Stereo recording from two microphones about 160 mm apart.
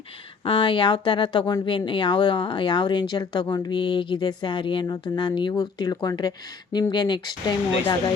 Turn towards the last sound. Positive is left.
turn(degrees=25)  # may be behind; listen again after turning